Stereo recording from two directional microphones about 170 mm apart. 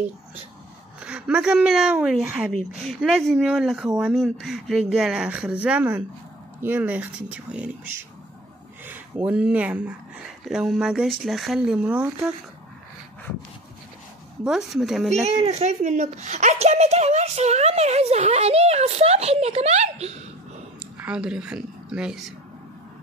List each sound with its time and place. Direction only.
1.0 s speech: 5° right (ahead or behind)
14.4 s speech: 5° right (ahead or behind)
15.2 s a child's voice: 40° right (ahead or behind)
21.0 s a woman's voice: 5° right (ahead or behind)